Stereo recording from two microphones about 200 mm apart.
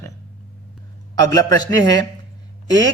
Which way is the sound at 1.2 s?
20° left (ahead or behind).